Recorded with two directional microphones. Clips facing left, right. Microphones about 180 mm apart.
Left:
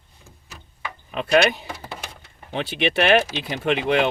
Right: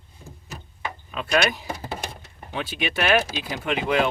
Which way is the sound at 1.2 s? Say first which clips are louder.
Left 5 dB; 25° left (ahead or behind).